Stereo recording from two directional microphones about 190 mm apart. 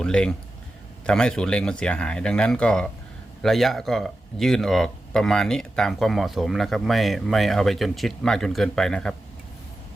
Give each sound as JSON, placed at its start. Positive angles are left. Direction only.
{"t": 0.0, "sound": "speech", "side_deg": 5}